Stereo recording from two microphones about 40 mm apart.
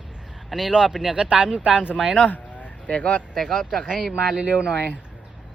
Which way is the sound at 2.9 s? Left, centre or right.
Left.